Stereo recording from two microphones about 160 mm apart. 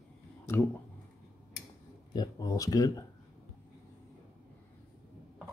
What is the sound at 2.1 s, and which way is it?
Speech, 25° left (ahead or behind).